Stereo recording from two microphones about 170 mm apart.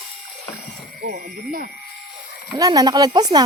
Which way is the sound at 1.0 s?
60° right (ahead or behind).